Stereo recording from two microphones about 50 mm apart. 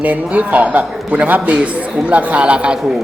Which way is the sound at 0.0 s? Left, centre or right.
Right.